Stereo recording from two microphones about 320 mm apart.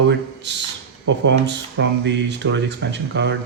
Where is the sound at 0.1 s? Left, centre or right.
Right.